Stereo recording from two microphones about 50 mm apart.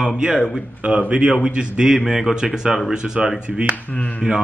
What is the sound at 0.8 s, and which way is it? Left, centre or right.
Speech, right.